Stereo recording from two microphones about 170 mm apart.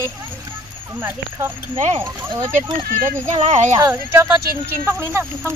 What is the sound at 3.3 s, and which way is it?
Speech, 40° right (ahead or behind).